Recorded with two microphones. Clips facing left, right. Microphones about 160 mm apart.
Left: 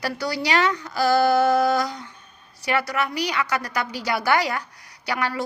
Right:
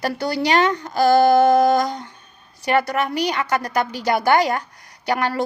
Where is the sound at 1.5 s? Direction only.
50° right (ahead or behind).